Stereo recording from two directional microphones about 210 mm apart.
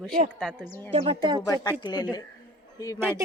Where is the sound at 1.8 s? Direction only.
20° left (ahead or behind).